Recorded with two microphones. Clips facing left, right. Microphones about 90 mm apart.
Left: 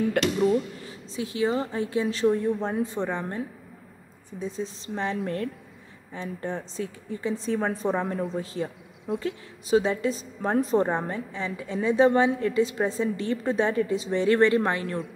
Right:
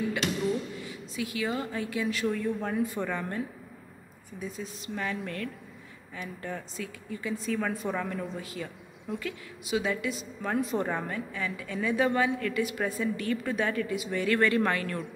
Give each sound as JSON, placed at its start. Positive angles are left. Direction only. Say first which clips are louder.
{"t": 0.4, "sound": "a woman's voice", "louder": "left 7 dB", "side_deg": 40}